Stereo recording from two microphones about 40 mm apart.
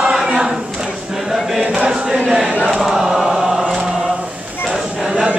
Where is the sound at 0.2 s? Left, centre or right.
Centre.